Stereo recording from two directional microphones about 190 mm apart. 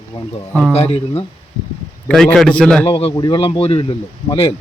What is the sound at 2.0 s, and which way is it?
Speech, 5° left (ahead or behind).